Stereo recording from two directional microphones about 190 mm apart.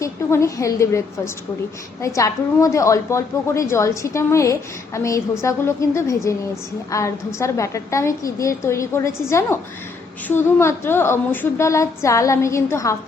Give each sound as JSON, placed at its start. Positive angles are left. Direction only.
{"t": 0.0, "sound": "a woman's voice", "side_deg": 15}